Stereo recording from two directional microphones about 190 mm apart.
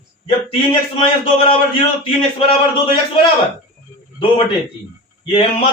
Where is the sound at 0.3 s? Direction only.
25° left (ahead or behind).